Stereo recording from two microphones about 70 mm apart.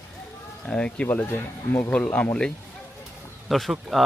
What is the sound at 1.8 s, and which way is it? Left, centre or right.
Speech, centre.